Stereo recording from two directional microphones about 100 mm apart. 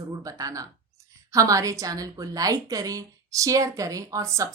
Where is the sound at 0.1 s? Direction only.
35° right (ahead or behind).